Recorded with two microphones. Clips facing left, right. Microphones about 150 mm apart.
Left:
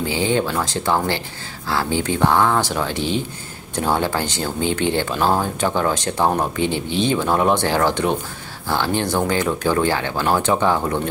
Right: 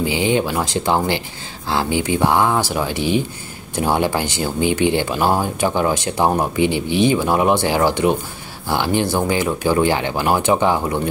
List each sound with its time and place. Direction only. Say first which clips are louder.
0.0 s speech: right 2 dB; 15° right (ahead or behind)